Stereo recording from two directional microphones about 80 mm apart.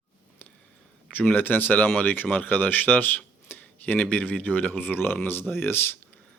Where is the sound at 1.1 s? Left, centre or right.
Left.